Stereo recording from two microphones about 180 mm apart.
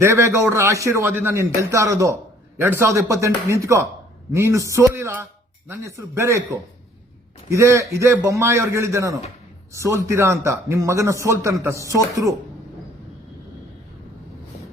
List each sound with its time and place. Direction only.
0.0 s speech: 15° right (ahead or behind)
7.5 s speech: 15° right (ahead or behind)